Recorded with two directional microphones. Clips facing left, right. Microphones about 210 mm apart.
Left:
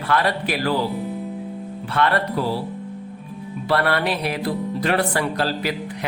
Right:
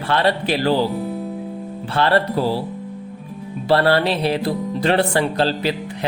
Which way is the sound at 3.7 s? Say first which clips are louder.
Right 5 dB; 30° right (ahead or behind).